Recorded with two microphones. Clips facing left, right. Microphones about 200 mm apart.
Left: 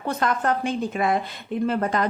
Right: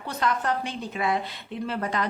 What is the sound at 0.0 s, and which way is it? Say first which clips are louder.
Speech: left 3 dB; 50° left (ahead or behind).